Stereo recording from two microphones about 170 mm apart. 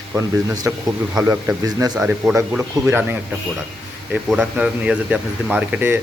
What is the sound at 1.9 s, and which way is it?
A man's voice, 5° right (ahead or behind).